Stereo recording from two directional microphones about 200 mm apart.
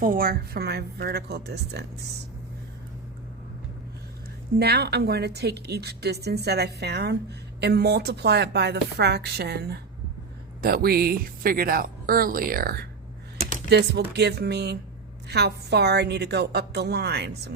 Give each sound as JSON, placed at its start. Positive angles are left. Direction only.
{"t": 0.0, "sound": "speech", "side_deg": -45}
{"t": 4.6, "sound": "a woman's voice", "side_deg": -55}